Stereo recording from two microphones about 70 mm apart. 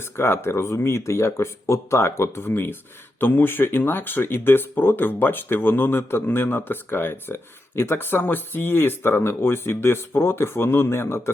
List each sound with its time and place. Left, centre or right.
0.0 s speech: left